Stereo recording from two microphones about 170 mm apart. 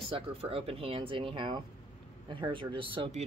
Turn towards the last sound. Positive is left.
turn(degrees=-35)  # may be behind; listen again after turning